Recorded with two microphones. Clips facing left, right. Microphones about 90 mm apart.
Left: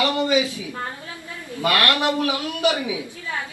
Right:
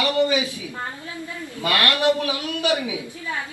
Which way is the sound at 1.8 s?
25° left (ahead or behind).